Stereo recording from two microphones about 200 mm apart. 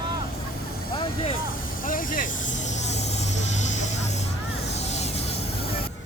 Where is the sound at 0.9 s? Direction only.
25° left (ahead or behind).